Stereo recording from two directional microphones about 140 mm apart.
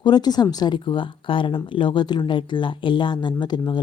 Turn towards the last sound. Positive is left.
turn(degrees=35)  # may be behind; listen again after turning